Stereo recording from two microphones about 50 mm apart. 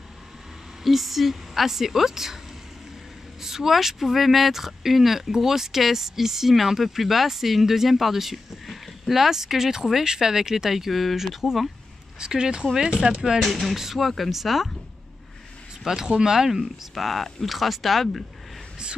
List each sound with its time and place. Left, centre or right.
0.8 s speech: centre
3.4 s speech: centre
12.2 s speech: centre
13.4 s speech: centre
15.8 s speech: centre